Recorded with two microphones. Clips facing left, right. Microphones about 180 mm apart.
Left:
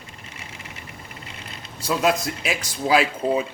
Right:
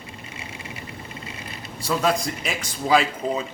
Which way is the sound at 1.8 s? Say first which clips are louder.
Left 1 dB; 5° left (ahead or behind).